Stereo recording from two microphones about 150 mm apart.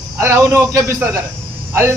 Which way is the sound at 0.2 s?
15° right (ahead or behind).